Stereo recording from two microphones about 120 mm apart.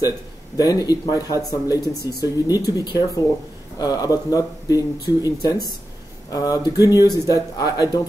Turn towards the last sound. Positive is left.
turn(degrees=30)  # may be behind; listen again after turning